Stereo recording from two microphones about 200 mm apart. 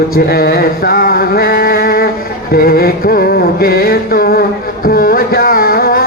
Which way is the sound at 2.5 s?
50° left (ahead or behind).